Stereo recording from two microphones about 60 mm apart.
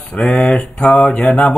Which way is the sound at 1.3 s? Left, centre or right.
Centre.